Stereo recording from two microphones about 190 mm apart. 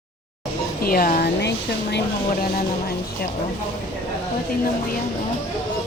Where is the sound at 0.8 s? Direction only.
50° left (ahead or behind).